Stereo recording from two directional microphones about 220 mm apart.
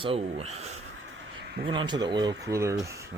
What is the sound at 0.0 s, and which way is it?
Speech, 25° right (ahead or behind).